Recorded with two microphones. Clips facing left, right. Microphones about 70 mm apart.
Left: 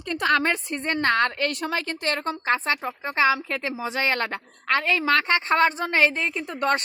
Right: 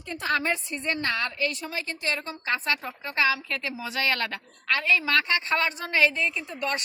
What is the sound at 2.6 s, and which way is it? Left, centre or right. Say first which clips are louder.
Speech: left 3 dB; left.